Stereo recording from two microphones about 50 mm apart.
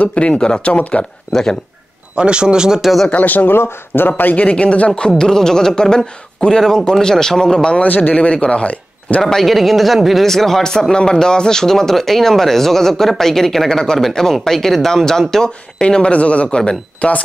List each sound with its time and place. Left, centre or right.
0.0 s speech: left
1.3 s speech: centre
2.1 s speech: centre
3.1 s speech: left
4.2 s speech: left
4.5 s speech: left
7.8 s speech: left
9.2 s speech: centre; by 17.2 s left